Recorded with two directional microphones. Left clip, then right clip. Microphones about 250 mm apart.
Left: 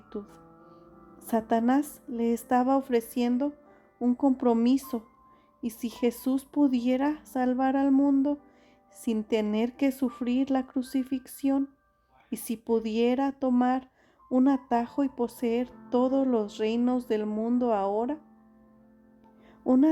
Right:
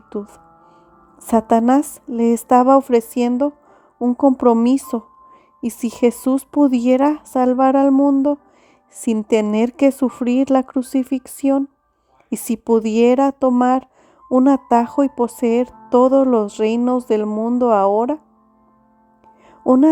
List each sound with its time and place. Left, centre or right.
0.1 s a woman's voice: right
19.5 s music: right